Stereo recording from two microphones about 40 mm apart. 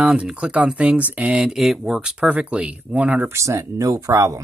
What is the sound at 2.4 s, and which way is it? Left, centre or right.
Speech, right.